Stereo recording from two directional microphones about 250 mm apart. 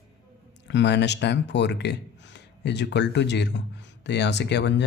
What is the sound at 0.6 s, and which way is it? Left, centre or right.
Speech, left.